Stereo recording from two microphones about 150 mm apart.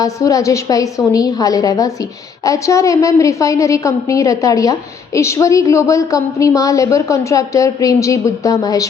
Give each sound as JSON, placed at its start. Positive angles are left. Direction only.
{"t": 0.0, "sound": "a woman's voice", "side_deg": 25}